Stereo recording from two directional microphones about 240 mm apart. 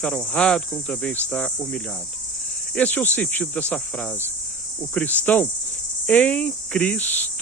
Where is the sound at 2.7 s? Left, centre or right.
Centre.